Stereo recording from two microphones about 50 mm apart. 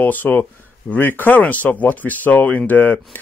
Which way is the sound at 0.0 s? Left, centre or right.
Left.